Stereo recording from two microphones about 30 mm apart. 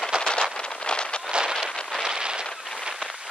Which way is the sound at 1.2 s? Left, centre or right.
Right.